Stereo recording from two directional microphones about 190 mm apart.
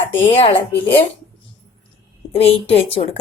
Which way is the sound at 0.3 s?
35° left (ahead or behind).